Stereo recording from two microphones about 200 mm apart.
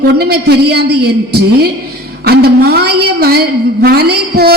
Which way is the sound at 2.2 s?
55° right (ahead or behind).